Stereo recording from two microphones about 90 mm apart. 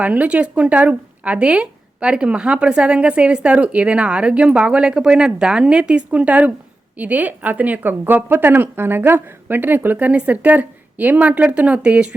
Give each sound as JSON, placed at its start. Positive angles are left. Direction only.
{"t": 0.0, "sound": "a woman's voice", "side_deg": -15}